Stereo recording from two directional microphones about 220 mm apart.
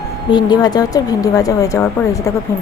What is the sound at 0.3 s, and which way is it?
Speech, 20° left (ahead or behind).